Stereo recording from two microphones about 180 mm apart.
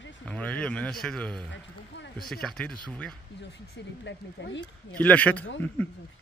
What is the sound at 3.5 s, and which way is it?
Speech, 75° left (ahead or behind).